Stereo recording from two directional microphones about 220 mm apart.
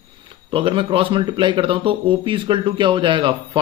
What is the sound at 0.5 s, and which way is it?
Speech, 25° right (ahead or behind).